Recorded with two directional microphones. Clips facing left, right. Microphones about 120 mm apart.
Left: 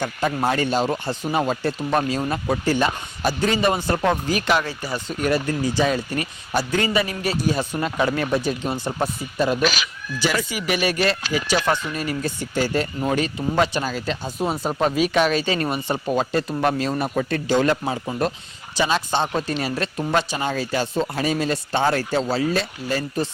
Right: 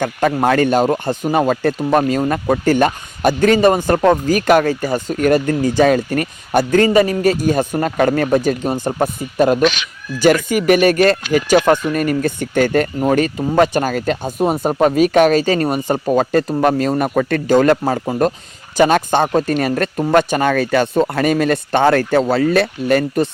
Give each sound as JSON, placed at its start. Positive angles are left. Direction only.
{"t": 0.0, "sound": "speech", "side_deg": -55}
{"t": 9.6, "sound": "speech", "side_deg": 5}
{"t": 10.2, "sound": "speech", "side_deg": -50}
{"t": 17.2, "sound": "speech", "side_deg": -65}
{"t": 18.0, "sound": "speech", "side_deg": -40}
{"t": 18.8, "sound": "speech", "side_deg": -55}